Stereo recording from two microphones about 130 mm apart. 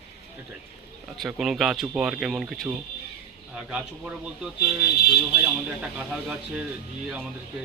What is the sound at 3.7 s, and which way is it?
A man's voice, 5° right (ahead or behind).